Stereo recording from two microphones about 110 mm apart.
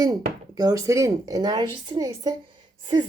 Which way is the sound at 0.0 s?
35° right (ahead or behind).